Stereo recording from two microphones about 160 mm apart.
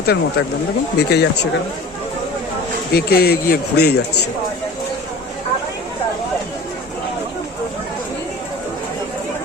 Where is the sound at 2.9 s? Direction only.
75° left (ahead or behind).